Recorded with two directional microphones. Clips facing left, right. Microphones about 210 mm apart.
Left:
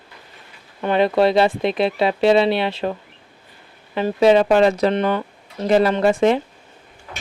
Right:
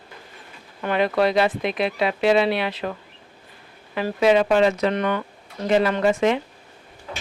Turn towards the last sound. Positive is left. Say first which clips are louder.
# left 3 dB
turn(degrees=35)  # may be behind; listen again after turning